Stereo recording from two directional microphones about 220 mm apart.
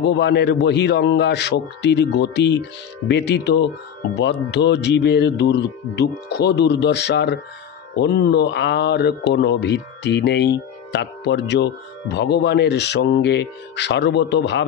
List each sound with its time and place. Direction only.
0.0 s speech: 50° left (ahead or behind)